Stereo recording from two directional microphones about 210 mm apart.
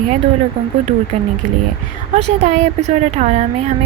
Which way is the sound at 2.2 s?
30° right (ahead or behind).